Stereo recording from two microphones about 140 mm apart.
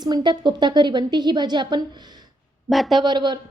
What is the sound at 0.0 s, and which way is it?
A woman's voice, 30° right (ahead or behind).